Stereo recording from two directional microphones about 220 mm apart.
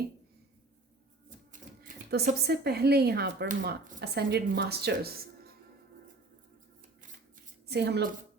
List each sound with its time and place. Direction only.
1.5 s speech: 40° right (ahead or behind)
7.7 s speech: 50° right (ahead or behind)